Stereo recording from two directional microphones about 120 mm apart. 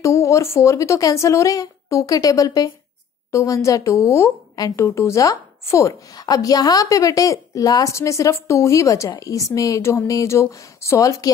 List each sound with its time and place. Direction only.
0.0 s a woman's voice: 25° left (ahead or behind)